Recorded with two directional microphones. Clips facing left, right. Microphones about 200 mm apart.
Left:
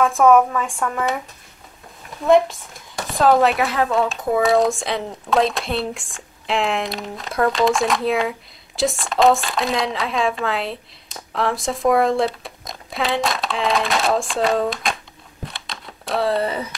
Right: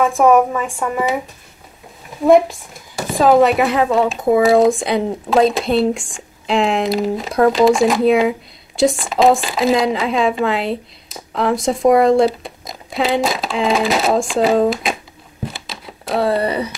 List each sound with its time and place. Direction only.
0.2 s a woman's voice: 15° right (ahead or behind)
2.2 s speech: centre (ahead or behind)
15.4 s a sound: centre (ahead or behind)
16.4 s speech: 70° right (ahead or behind)